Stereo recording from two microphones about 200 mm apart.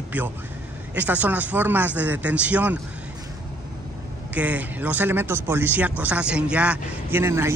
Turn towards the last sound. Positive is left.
turn(degrees=-15)  # may be behind; listen again after turning